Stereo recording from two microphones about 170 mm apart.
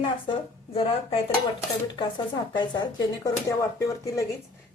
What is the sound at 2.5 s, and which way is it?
A woman's voice, 25° left (ahead or behind).